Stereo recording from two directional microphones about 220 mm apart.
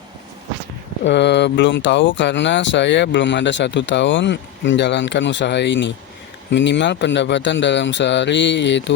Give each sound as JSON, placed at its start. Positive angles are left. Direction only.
{"t": 1.0, "sound": "speech", "side_deg": 50}